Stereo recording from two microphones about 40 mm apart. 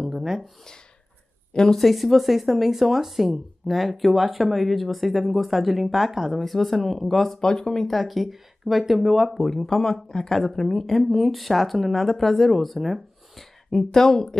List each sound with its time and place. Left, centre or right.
0.0 s a sound: centre
1.5 s speech: centre
1.8 s speech: centre
7.3 s speech: centre
13.9 s speech: centre